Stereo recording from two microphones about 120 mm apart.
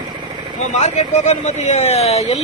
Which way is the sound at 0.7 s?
75° left (ahead or behind).